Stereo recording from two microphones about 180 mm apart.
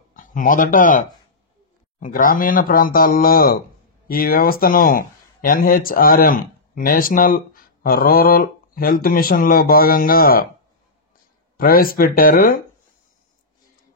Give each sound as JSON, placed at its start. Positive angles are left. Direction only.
{"t": 0.1, "sound": "speech", "side_deg": 45}
{"t": 11.5, "sound": "speech", "side_deg": 55}